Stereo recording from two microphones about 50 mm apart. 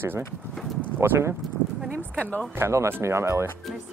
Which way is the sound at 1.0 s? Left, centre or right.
Right.